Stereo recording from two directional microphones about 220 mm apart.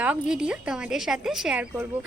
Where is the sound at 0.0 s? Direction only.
5° right (ahead or behind).